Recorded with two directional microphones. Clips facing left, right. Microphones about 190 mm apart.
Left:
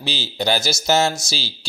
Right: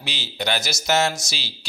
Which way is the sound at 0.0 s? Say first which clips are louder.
Left 5 dB; 30° left (ahead or behind).